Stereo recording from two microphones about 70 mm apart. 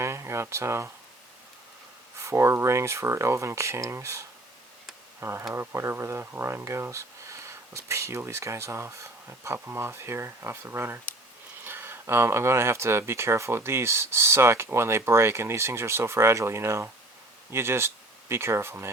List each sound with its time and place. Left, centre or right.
0.0 s a sound: right
0.5 s speech: right
2.1 s speech: right